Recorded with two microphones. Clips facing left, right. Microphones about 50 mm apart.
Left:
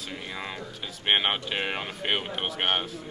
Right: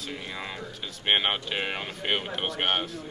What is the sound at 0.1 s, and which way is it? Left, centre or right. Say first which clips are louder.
Speech: left 1 dB; centre.